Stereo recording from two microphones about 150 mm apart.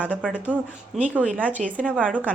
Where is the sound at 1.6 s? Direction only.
60° right (ahead or behind).